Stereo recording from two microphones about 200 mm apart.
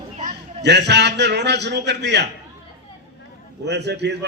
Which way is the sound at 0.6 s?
60° right (ahead or behind).